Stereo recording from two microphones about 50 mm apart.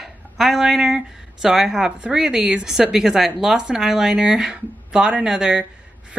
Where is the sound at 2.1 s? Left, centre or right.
Centre.